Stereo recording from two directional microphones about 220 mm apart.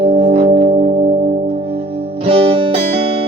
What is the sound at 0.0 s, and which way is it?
Music, 30° right (ahead or behind).